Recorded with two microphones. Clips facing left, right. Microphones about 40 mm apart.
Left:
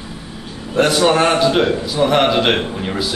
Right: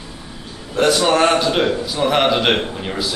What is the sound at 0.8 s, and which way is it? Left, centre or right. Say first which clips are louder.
A man's voice: left 1 dB; centre.